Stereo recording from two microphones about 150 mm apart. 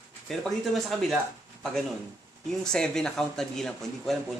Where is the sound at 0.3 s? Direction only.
Centre (ahead or behind).